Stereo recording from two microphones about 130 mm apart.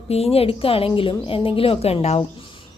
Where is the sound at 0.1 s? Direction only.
50° left (ahead or behind).